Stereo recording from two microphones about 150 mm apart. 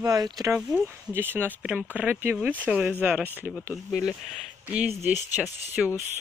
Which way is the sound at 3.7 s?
Centre (ahead or behind).